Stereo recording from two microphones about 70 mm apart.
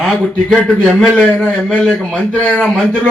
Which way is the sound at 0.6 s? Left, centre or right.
Centre.